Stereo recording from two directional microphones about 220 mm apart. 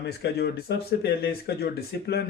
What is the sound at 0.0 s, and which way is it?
Speech, 45° left (ahead or behind).